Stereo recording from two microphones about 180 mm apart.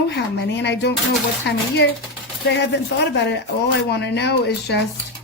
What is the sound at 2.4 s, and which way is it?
Speech, 70° left (ahead or behind).